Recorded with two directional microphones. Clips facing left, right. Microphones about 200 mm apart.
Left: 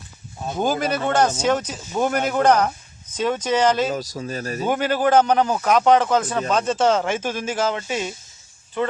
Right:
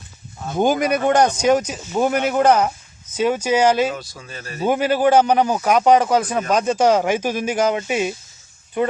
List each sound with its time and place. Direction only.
0.6 s speech: 15° right (ahead or behind)
3.8 s speech: 40° left (ahead or behind)
4.6 s speech: 10° right (ahead or behind)